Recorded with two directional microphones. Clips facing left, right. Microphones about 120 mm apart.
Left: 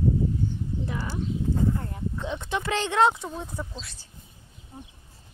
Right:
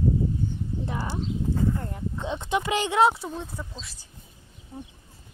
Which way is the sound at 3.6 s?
5° left (ahead or behind).